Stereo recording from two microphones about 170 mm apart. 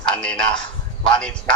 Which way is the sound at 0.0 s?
5° left (ahead or behind).